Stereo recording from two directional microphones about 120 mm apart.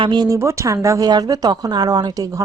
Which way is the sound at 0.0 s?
40° right (ahead or behind).